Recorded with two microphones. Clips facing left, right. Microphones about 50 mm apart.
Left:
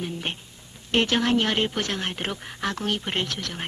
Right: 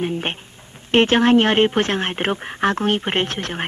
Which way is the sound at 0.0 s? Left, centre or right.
Right.